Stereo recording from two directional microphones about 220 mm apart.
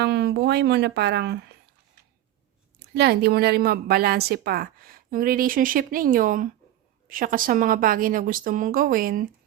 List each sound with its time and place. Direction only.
0.0 s a woman's voice: 50° right (ahead or behind)
2.7 s a woman's voice: 45° right (ahead or behind)